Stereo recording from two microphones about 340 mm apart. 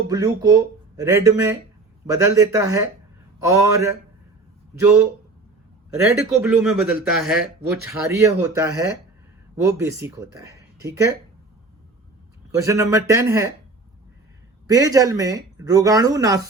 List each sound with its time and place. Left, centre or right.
0.1 s speech: centre
6.0 s speech: centre
12.5 s speech: centre
14.7 s speech: centre